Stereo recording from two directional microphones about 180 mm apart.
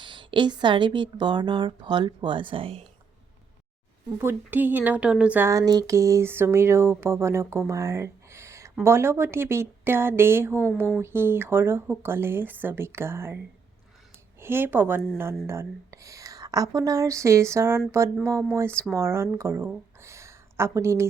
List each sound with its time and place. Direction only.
0.0 s speech: 25° right (ahead or behind)
4.2 s speech: 10° right (ahead or behind)
7.7 s a sound: 15° right (ahead or behind)
8.8 s speech: 15° right (ahead or behind)